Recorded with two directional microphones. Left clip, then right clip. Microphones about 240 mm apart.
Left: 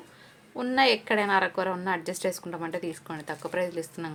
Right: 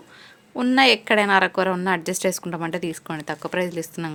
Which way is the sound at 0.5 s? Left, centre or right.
Right.